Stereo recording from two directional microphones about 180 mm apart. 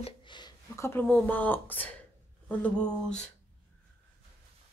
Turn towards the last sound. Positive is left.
turn(degrees=5)  # may be behind; listen again after turning